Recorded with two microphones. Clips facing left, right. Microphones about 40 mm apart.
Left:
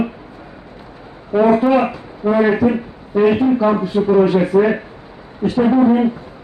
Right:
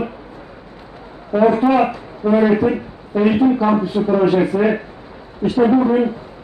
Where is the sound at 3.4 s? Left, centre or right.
Centre.